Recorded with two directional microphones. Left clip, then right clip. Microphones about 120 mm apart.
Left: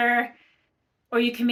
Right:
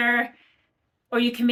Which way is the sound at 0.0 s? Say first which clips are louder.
Even; 30° right (ahead or behind).